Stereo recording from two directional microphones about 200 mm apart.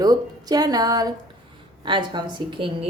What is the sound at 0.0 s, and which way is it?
A woman's voice, 20° right (ahead or behind).